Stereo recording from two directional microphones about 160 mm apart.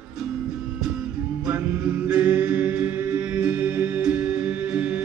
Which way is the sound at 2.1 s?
5° right (ahead or behind).